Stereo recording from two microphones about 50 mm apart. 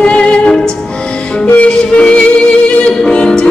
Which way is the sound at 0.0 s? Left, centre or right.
Left.